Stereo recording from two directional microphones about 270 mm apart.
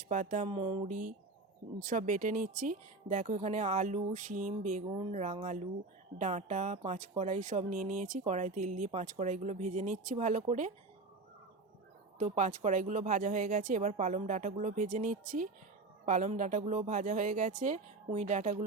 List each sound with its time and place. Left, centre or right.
0.1 s speech: right
12.2 s speech: right